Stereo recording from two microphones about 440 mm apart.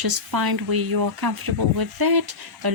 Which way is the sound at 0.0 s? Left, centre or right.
Right.